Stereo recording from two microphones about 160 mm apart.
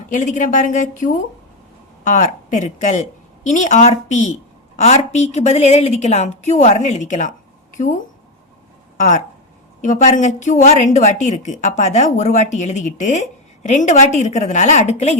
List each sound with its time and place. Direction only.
0.1 s a woman's voice: 50° left (ahead or behind)
9.0 s a woman's voice: 50° left (ahead or behind)